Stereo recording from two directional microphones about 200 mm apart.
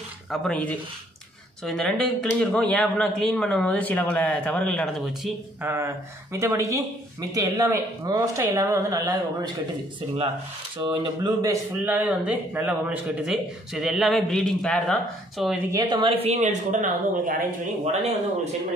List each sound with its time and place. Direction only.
0.3 s speech: 5° left (ahead or behind)
5.6 s speech: 10° right (ahead or behind)
10.8 s speech: 25° right (ahead or behind)
11.8 s speech: 10° right (ahead or behind)
15.7 s speech: 20° right (ahead or behind)
16.3 s a woman's voice: 35° right (ahead or behind)